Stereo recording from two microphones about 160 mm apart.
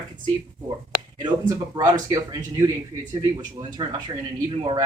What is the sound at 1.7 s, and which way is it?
Speech, 25° right (ahead or behind).